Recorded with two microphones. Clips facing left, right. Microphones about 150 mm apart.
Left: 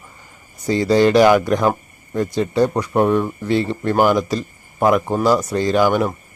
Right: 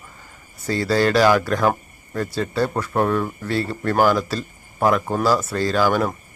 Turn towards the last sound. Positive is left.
turn(degrees=15)  # may be behind; listen again after turning